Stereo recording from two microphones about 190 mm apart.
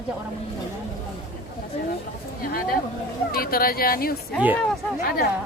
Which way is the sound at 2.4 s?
50° left (ahead or behind).